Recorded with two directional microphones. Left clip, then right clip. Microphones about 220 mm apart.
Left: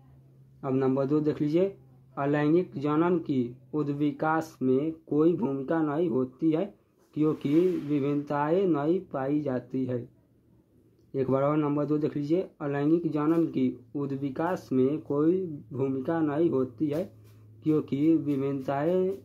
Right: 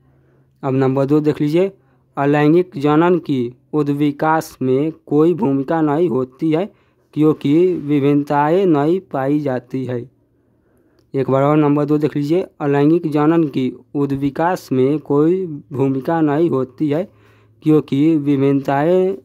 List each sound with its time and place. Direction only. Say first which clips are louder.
0.6 s speech: right 10 dB; 40° right (ahead or behind)
11.1 s speech: right 11 dB; 40° right (ahead or behind)